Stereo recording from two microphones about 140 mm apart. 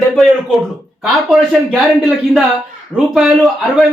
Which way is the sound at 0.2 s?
Centre (ahead or behind).